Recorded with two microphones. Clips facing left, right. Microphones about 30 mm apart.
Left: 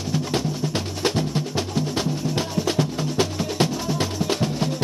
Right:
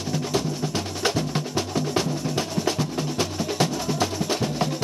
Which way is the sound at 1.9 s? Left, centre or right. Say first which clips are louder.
Even; left.